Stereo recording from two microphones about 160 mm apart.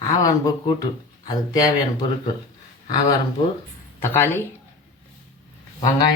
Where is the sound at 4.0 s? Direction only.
15° left (ahead or behind).